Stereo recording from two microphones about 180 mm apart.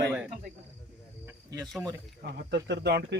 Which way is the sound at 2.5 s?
70° right (ahead or behind).